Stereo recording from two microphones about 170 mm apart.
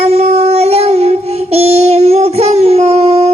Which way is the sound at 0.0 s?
40° right (ahead or behind).